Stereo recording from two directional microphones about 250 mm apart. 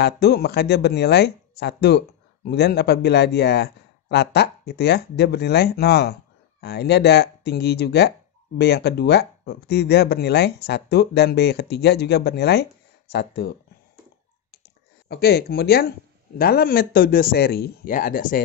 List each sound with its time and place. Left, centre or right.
0.0 s speech: left
15.0 s speech: left